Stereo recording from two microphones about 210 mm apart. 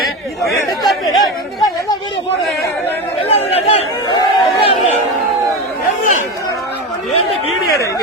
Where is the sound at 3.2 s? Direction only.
30° left (ahead or behind).